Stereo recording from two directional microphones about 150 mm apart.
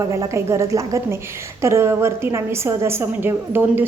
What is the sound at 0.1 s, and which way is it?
A woman's voice, 20° right (ahead or behind).